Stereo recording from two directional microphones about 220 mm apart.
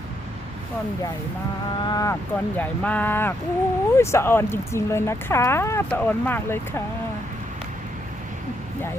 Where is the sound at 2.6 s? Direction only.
5° left (ahead or behind).